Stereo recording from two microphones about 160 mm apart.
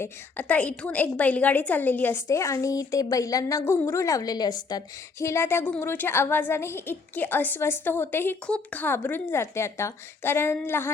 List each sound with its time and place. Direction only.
0.0 s a woman's voice: 10° left (ahead or behind)